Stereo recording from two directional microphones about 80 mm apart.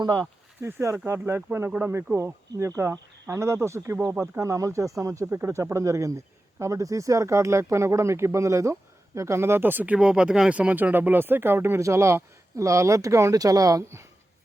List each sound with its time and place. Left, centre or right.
0.6 s speech: right
5.2 s speech: right